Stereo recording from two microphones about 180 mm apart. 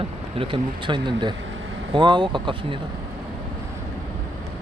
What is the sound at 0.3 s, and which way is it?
Speech, 25° right (ahead or behind).